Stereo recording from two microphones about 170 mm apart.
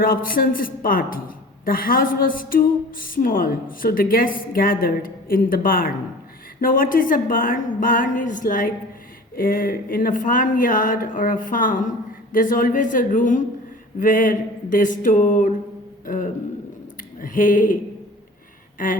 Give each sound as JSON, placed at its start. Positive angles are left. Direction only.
{"t": 0.0, "sound": "a woman's voice", "side_deg": 55}
{"t": 18.8, "sound": "speech", "side_deg": 55}